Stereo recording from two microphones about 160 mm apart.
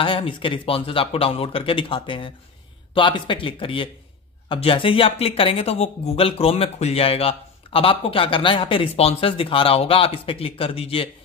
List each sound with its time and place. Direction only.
0.0 s speech: 30° left (ahead or behind)